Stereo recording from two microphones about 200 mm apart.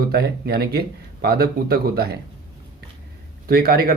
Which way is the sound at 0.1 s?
50° right (ahead or behind).